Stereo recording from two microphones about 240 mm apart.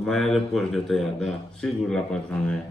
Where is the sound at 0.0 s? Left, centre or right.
Centre.